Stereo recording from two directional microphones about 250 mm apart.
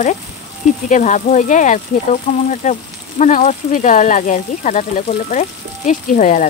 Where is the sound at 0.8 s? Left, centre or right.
Left.